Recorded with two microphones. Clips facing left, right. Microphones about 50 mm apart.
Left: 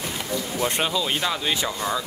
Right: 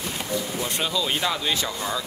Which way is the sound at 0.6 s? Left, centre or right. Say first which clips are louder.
Left 6 dB; left.